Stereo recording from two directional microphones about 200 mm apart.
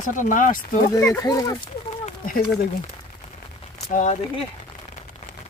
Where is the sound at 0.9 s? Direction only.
15° left (ahead or behind).